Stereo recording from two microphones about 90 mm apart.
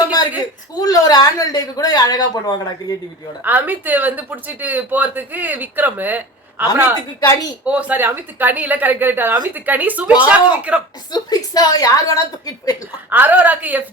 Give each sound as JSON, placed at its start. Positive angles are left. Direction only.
{"t": 0.0, "sound": "a sound", "side_deg": 50}
{"t": 0.8, "sound": "a woman's voice", "side_deg": 45}
{"t": 3.4, "sound": "speech", "side_deg": -20}
{"t": 11.1, "sound": "a woman's voice", "side_deg": 45}
{"t": 13.1, "sound": "speech", "side_deg": -20}